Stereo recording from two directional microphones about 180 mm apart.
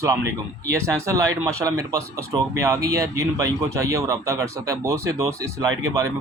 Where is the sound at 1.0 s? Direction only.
20° right (ahead or behind).